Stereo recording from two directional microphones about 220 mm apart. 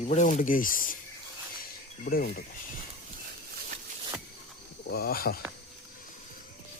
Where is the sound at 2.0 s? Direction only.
40° left (ahead or behind).